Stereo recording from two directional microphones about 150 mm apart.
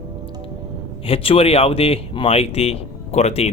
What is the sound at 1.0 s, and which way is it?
Speech, 40° left (ahead or behind).